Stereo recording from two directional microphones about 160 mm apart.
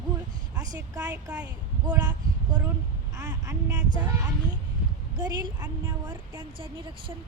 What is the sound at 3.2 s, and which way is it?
Speech, 25° right (ahead or behind).